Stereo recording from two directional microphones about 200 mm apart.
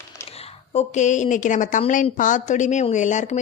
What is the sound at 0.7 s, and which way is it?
A woman's voice, 35° left (ahead or behind).